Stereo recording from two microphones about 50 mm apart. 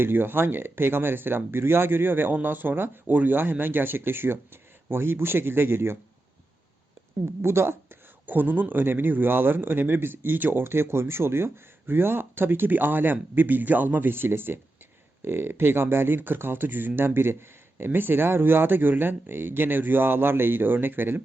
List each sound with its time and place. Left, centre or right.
0.0 s a man's voice: right
7.4 s speech: right
8.3 s a man's voice: right